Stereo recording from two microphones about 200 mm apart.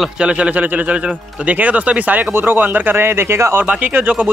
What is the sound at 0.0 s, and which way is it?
Speech, 5° right (ahead or behind).